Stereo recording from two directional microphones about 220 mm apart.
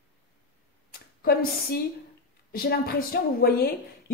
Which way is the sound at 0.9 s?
45° left (ahead or behind).